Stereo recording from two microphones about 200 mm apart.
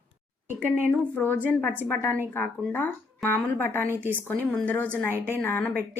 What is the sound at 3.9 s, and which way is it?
Speech, 10° right (ahead or behind).